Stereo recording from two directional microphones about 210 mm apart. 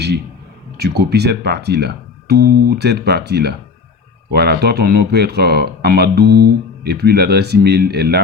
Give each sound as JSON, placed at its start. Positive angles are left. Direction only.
{"t": 0.8, "sound": "speech", "side_deg": -50}